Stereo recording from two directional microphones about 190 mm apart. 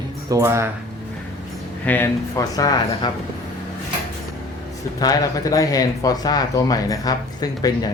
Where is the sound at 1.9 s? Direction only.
10° left (ahead or behind).